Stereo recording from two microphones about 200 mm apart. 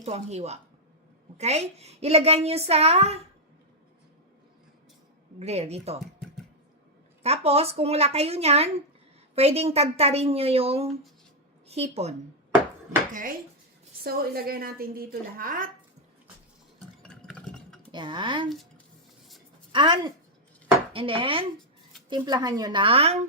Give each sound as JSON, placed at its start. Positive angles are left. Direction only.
{"t": 0.0, "sound": "a child's voice", "side_deg": -35}
{"t": 5.4, "sound": "a child's voice", "side_deg": -30}
{"t": 7.2, "sound": "a child's voice", "side_deg": -30}
{"t": 14.0, "sound": "a woman's voice", "side_deg": -50}
{"t": 17.0, "sound": "a sound", "side_deg": 5}
{"t": 17.9, "sound": "a woman's voice", "side_deg": -25}
{"t": 19.7, "sound": "a woman's voice", "side_deg": -25}